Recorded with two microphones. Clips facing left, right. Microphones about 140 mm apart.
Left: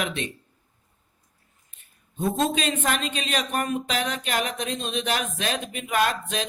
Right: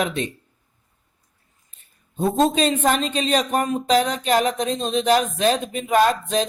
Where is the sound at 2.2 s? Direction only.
30° right (ahead or behind).